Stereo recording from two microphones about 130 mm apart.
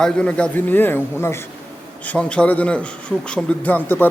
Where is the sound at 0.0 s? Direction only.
10° left (ahead or behind).